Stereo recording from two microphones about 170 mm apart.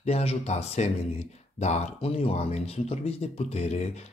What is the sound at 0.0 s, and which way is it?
Speech, 35° left (ahead or behind).